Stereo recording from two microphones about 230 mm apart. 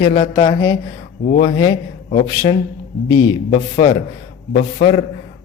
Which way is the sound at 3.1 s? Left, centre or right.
Left.